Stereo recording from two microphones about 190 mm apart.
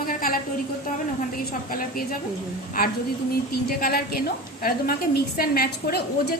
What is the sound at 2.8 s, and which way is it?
A woman's voice, 50° left (ahead or behind).